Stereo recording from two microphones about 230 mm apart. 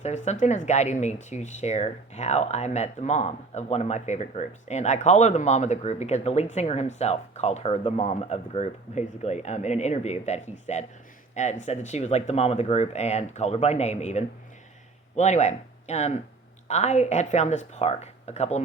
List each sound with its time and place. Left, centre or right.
0.0 s speech: left